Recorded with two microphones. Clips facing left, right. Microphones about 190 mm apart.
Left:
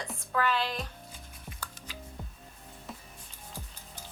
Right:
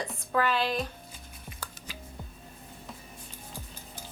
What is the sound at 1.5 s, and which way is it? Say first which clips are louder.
Music: right 1 dB; 10° right (ahead or behind).